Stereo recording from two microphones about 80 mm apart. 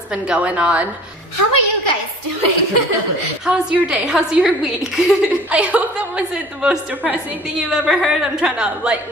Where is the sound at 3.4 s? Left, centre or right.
Centre.